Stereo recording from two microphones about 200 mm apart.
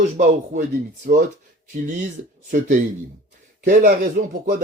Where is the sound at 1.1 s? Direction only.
45° right (ahead or behind).